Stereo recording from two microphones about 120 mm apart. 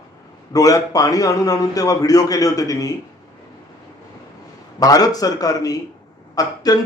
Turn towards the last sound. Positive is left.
turn(degrees=35)  # may be behind; listen again after turning